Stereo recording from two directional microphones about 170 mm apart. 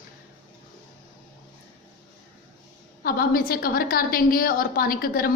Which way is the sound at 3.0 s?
60° left (ahead or behind).